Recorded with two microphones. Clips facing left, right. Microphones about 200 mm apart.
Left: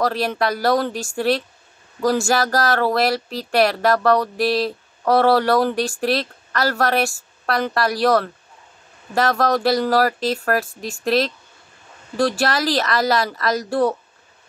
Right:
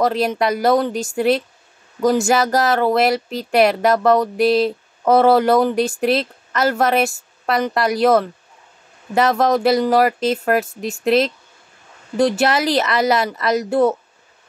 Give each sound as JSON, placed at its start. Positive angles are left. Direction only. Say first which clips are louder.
{"t": 0.0, "sound": "speech", "louder": "right 3 dB", "side_deg": -20}